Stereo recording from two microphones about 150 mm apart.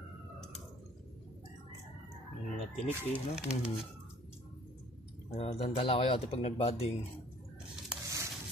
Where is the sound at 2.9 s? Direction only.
10° right (ahead or behind).